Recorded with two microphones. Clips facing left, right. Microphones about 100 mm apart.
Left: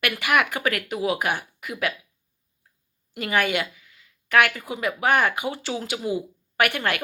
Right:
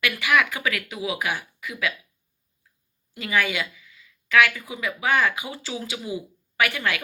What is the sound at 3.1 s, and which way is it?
A woman's voice, 55° left (ahead or behind).